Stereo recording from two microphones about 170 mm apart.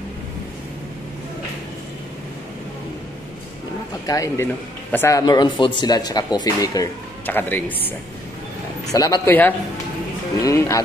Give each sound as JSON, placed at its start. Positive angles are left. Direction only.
{"t": 4.0, "sound": "speech", "side_deg": 20}
{"t": 8.9, "sound": "a man's voice", "side_deg": 20}